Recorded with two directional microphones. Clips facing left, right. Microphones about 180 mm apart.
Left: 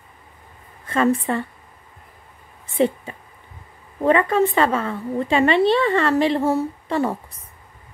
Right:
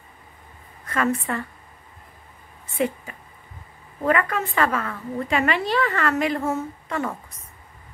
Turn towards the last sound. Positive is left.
turn(degrees=30)  # may be behind; listen again after turning